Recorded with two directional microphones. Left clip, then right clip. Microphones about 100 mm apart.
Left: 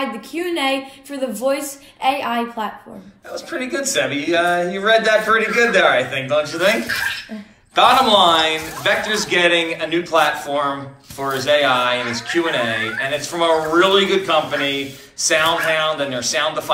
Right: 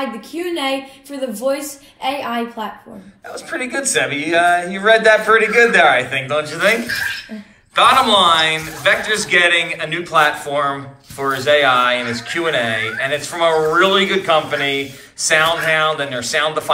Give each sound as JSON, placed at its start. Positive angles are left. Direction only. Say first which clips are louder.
{"t": 0.3, "sound": "a woman's voice", "louder": "left 1 dB", "side_deg": 10}
{"t": 3.8, "sound": "a man's voice", "louder": "right 1 dB", "side_deg": 20}